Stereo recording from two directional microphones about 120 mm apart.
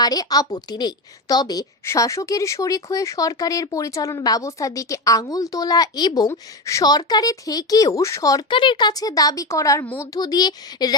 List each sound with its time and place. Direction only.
0.0 s a woman's voice: 30° left (ahead or behind)